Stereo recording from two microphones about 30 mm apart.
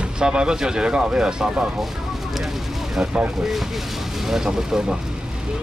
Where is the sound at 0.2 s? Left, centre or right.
Right.